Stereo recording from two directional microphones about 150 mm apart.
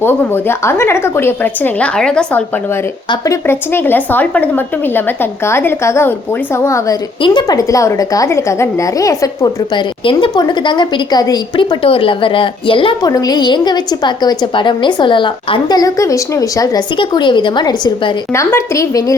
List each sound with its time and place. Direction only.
0.0 s a woman's voice: 15° left (ahead or behind)
3.4 s a woman's voice: 15° left (ahead or behind)
7.2 s a woman's voice: 30° left (ahead or behind)
10.0 s a woman's voice: 35° left (ahead or behind)
13.1 s a woman's voice: 25° left (ahead or behind)